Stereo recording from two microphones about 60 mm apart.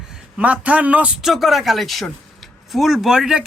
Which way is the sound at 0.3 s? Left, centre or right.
Right.